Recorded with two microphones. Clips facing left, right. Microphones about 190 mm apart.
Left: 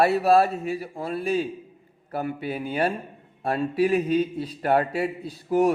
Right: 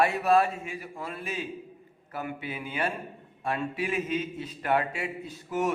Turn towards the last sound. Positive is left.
turn(degrees=35)  # may be behind; listen again after turning